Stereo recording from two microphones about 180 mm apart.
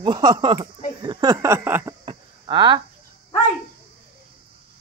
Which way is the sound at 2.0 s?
25° right (ahead or behind).